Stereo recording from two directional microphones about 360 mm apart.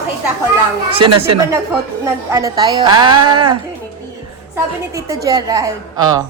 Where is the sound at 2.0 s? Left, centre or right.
Centre.